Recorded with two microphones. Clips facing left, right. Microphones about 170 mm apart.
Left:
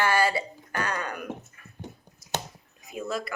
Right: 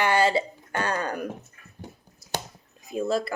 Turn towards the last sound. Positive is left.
turn(degrees=-30)  # may be behind; listen again after turning